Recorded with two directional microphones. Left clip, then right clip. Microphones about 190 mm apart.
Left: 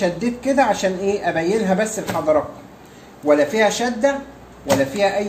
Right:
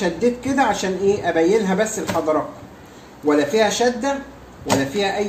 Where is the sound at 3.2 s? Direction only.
25° left (ahead or behind).